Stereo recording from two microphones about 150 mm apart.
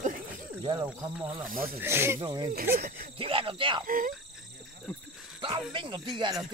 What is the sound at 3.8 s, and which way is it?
Speech, 65° right (ahead or behind).